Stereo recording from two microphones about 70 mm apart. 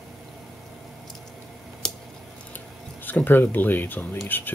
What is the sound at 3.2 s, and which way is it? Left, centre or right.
Speech, left.